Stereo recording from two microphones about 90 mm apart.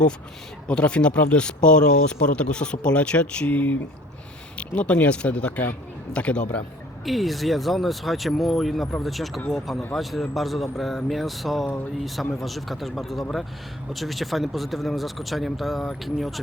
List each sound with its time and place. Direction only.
0.7 s speech: 10° left (ahead or behind)
7.0 s speech: centre (ahead or behind)